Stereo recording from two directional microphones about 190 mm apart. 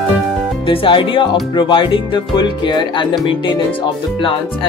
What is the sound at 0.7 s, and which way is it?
Speech, 25° left (ahead or behind).